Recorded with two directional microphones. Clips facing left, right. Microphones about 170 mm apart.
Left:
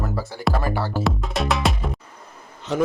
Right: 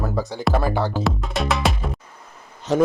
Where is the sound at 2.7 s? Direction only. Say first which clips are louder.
Right 4 dB; 45° right (ahead or behind).